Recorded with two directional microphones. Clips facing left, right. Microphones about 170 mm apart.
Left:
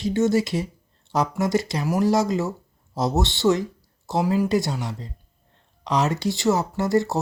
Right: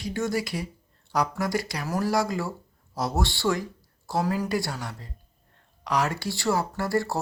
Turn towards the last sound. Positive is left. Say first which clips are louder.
# left 5 dB
turn(degrees=20)  # may be behind; listen again after turning